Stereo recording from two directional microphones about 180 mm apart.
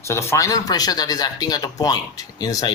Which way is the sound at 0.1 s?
15° left (ahead or behind).